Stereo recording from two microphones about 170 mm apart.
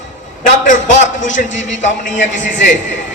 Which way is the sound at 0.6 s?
50° left (ahead or behind).